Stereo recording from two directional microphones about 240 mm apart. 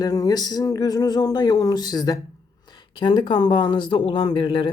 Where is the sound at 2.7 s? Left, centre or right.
Centre.